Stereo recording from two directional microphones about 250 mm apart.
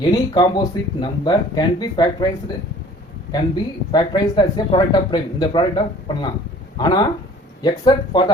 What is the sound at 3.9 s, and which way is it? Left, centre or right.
Speech, centre.